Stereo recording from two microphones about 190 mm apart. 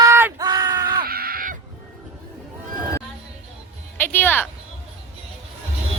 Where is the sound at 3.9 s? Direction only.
10° left (ahead or behind).